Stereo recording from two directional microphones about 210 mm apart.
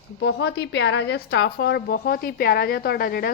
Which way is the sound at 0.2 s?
55° left (ahead or behind).